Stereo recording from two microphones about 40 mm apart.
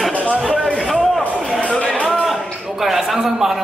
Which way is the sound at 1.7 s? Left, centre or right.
Left.